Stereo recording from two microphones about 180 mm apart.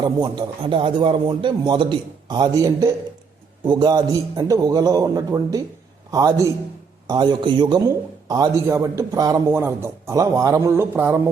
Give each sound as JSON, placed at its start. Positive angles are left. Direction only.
{"t": 0.0, "sound": "a man's voice", "side_deg": -25}